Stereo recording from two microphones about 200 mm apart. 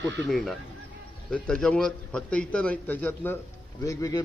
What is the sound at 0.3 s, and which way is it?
A man's voice, centre (ahead or behind).